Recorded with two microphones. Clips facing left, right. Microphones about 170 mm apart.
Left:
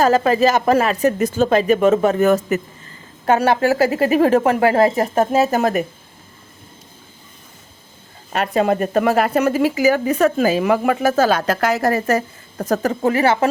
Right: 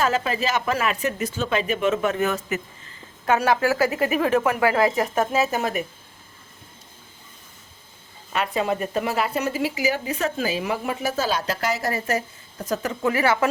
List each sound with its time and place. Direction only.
0.2 s speech: 40° left (ahead or behind)
8.3 s speech: 40° left (ahead or behind)